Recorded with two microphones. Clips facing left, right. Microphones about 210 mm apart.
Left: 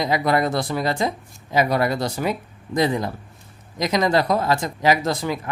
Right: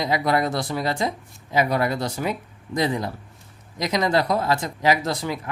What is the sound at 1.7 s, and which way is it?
Speech, 40° left (ahead or behind).